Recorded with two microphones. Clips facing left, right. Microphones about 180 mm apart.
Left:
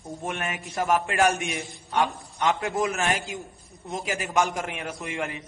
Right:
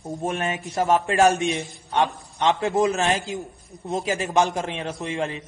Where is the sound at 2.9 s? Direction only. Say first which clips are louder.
Right 4 dB; 30° right (ahead or behind).